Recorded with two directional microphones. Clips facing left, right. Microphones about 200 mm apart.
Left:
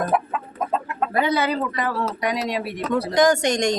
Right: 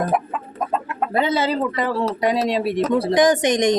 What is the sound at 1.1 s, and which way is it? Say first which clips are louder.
Speech: right 2 dB; 25° right (ahead or behind).